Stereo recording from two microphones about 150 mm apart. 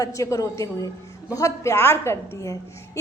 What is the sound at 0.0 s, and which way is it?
A woman's voice, 20° left (ahead or behind).